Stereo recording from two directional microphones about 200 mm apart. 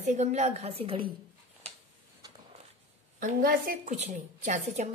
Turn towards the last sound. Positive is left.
turn(degrees=-35)  # may be behind; listen again after turning